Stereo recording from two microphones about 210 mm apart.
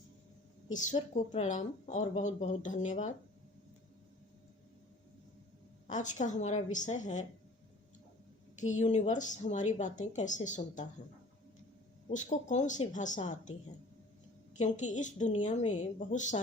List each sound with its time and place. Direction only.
0.7 s speech: 35° left (ahead or behind)
5.9 s speech: 35° left (ahead or behind)
8.6 s speech: 35° left (ahead or behind)
12.0 s speech: 35° left (ahead or behind)
14.6 s speech: 35° left (ahead or behind)